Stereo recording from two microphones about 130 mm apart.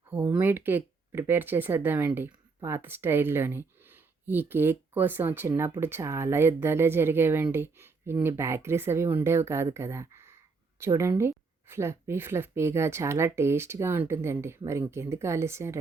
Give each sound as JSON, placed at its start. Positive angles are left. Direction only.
{"t": 0.1, "sound": "speech", "side_deg": -15}